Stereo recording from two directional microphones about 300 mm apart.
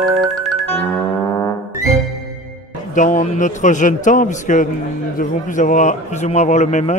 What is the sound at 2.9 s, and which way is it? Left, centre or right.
A man's voice, left.